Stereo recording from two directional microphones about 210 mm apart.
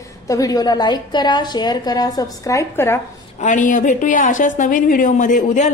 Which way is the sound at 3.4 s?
35° left (ahead or behind).